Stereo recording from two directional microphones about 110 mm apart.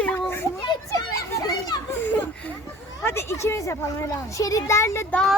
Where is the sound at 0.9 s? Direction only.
30° left (ahead or behind).